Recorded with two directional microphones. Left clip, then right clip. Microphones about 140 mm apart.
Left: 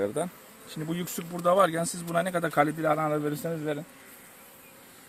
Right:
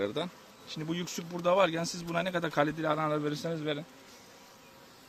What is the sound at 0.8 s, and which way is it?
A man's voice, 40° left (ahead or behind).